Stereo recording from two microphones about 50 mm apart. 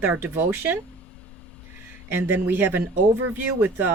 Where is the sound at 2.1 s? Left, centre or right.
Right.